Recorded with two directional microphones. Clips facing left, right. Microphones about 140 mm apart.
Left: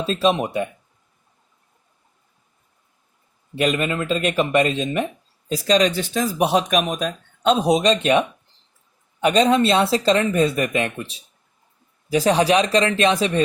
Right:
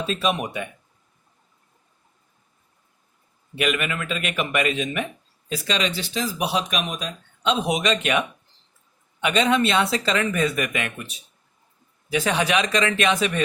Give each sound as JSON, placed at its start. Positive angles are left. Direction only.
{"t": 0.0, "sound": "speech", "side_deg": 35}
{"t": 3.5, "sound": "speech", "side_deg": 35}
{"t": 9.2, "sound": "speech", "side_deg": 35}